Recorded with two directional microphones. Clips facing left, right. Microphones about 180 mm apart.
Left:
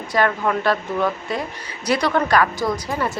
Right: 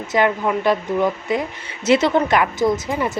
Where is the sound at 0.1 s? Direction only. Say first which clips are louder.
Right 2 dB; 15° right (ahead or behind).